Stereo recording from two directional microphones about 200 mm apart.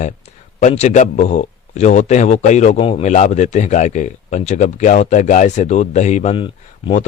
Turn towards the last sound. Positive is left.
turn(degrees=30)  # may be behind; listen again after turning